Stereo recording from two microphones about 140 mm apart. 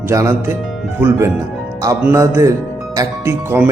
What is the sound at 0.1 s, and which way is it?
A man's voice, 20° right (ahead or behind).